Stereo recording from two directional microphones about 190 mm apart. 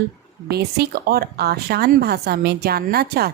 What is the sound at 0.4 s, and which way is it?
Speech, 55° right (ahead or behind).